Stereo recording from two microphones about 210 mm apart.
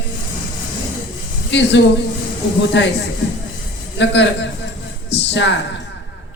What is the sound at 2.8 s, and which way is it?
Speech, 55° left (ahead or behind).